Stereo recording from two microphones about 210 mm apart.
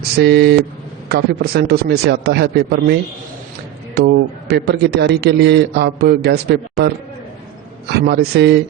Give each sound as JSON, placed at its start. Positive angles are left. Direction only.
{"t": 0.2, "sound": "a man's voice", "side_deg": -50}
{"t": 3.9, "sound": "a man's voice", "side_deg": -50}
{"t": 7.9, "sound": "a man's voice", "side_deg": -50}